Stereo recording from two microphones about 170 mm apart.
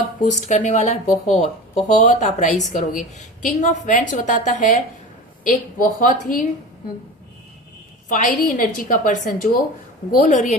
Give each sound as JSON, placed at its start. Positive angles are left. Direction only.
{"t": 0.3, "sound": "speech", "side_deg": 45}
{"t": 8.1, "sound": "speech", "side_deg": 50}